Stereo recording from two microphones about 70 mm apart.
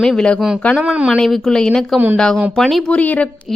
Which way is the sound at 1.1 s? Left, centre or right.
Centre.